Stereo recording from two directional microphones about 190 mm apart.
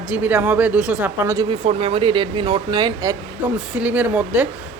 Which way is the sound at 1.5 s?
30° right (ahead or behind).